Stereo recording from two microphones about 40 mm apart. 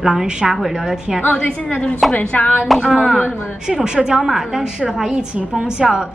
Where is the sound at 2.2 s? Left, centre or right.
Left.